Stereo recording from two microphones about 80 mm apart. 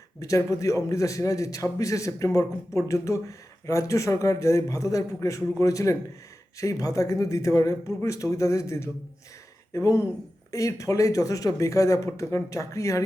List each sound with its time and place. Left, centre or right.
0.2 s a man's voice: left